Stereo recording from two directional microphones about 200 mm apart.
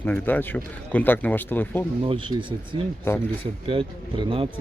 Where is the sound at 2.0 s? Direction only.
25° right (ahead or behind).